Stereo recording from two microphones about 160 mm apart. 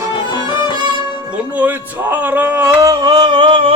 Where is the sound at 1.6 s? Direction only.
10° right (ahead or behind).